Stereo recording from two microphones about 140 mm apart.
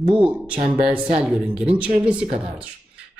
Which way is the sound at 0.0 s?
40° right (ahead or behind).